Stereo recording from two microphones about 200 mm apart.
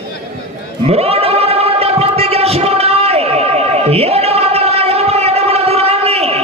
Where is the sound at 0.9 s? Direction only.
30° right (ahead or behind).